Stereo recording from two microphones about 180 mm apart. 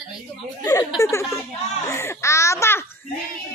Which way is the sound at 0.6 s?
20° left (ahead or behind).